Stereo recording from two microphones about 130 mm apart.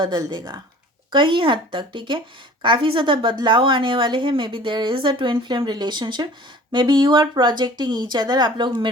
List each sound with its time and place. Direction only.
0.0 s a woman's voice: 30° right (ahead or behind)